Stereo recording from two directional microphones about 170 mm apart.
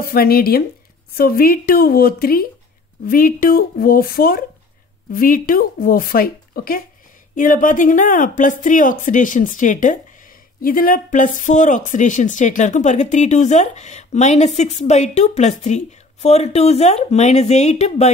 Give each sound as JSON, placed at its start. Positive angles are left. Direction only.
{"t": 0.0, "sound": "speech", "side_deg": 60}